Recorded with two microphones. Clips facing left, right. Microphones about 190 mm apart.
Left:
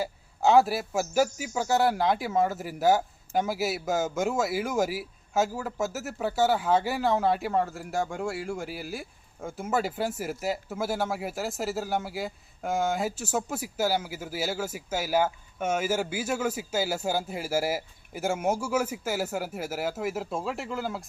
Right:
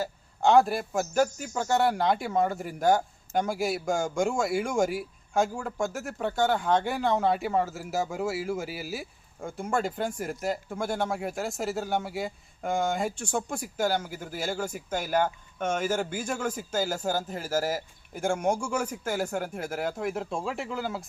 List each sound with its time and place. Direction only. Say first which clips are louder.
0.0 s a man's voice: even; 5° left (ahead or behind)